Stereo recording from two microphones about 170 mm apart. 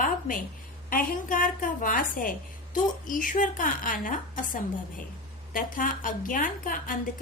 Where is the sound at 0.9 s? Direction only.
55° left (ahead or behind).